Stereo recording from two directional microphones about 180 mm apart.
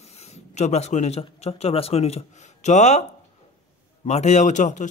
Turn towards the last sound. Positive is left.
turn(degrees=40)  # may be behind; listen again after turning